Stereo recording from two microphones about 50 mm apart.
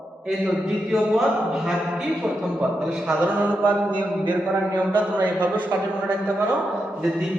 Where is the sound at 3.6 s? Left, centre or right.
Right.